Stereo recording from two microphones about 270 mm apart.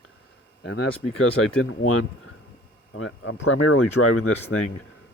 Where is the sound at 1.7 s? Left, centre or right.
Left.